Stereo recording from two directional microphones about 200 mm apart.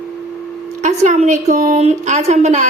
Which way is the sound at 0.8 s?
35° right (ahead or behind).